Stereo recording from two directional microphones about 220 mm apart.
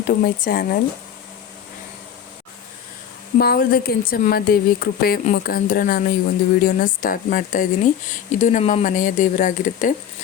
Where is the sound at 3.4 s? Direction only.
45° left (ahead or behind).